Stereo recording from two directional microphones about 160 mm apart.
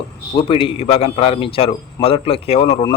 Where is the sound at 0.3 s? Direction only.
35° left (ahead or behind).